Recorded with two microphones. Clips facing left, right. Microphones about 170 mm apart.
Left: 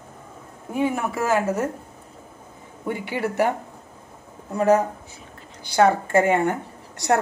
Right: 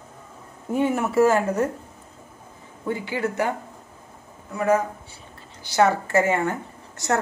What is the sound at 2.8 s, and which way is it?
Speech, 20° left (ahead or behind).